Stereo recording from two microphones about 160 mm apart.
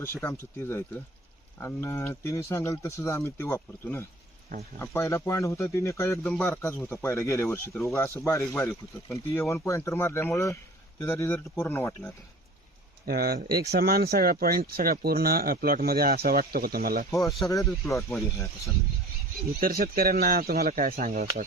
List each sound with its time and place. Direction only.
0.0 s speech: 15° left (ahead or behind)
13.1 s speech: 75° right (ahead or behind)
17.2 s speech: centre (ahead or behind)
17.5 s speech: 20° left (ahead or behind)
19.5 s speech: 65° right (ahead or behind)